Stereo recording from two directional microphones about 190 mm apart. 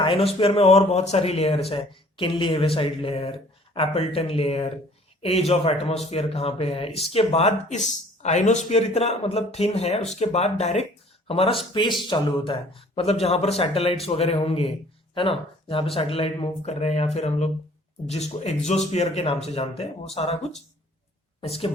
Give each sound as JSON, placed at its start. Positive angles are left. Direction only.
{"t": 0.0, "sound": "speech", "side_deg": 30}
{"t": 21.4, "sound": "speech", "side_deg": 30}